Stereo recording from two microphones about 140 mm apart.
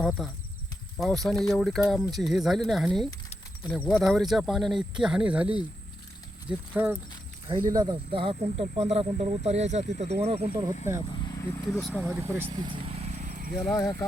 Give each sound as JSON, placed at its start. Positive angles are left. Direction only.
{"t": 0.0, "sound": "speech", "side_deg": 0}
{"t": 7.4, "sound": "speech", "side_deg": -25}
{"t": 8.1, "sound": "speech", "side_deg": -40}
{"t": 10.5, "sound": "speech", "side_deg": -30}
{"t": 11.1, "sound": "speech", "side_deg": 30}
{"t": 11.7, "sound": "speech", "side_deg": 5}
{"t": 12.0, "sound": "speech", "side_deg": -15}
{"t": 12.5, "sound": "vehicle", "side_deg": -40}
{"t": 13.7, "sound": "speech", "side_deg": 20}